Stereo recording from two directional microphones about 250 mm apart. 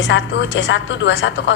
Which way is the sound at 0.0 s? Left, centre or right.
Left.